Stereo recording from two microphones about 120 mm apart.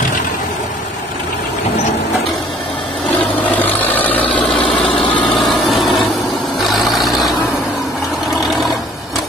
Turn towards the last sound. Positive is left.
turn(degrees=0)  # may be behind; listen again after turning